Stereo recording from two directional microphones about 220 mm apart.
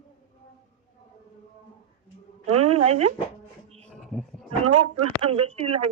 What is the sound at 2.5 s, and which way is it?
Speech, 90° right.